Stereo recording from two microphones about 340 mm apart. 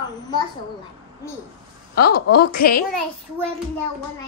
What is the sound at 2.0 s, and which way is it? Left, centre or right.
Speech, left.